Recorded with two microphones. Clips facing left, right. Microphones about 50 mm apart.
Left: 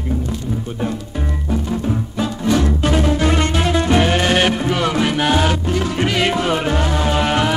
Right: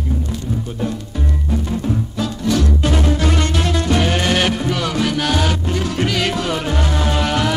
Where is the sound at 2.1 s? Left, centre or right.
Left.